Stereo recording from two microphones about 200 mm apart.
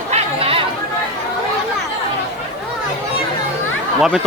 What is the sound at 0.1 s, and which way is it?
Chatter, 30° right (ahead or behind).